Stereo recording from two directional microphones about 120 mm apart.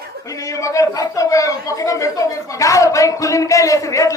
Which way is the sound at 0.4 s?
25° left (ahead or behind).